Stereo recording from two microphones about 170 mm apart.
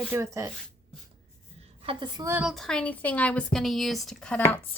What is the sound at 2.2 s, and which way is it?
A woman's voice, 10° right (ahead or behind).